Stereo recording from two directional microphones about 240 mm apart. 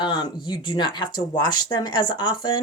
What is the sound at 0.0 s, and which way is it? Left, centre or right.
Speech, centre.